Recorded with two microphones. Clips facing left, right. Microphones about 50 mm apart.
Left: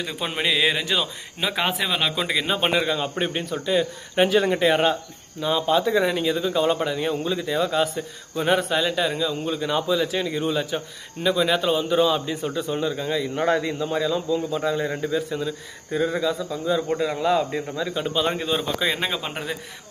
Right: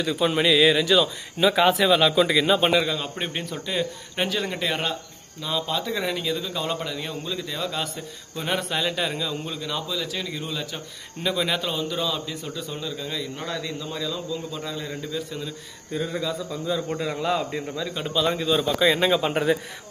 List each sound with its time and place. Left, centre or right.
0.0 s speech: left
4.2 s a man's voice: centre
9.6 s a man's voice: left
11.2 s a man's voice: centre; by 13.4 s left
13.4 s a man's voice: left
15.3 s speech: centre
18.1 s a man's voice: left
18.8 s speech: centre
19.2 s a man's voice: centre